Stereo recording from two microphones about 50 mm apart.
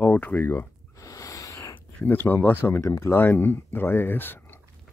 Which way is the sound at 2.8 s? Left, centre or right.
Left.